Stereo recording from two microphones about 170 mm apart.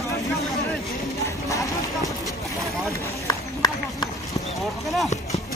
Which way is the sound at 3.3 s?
25° left (ahead or behind).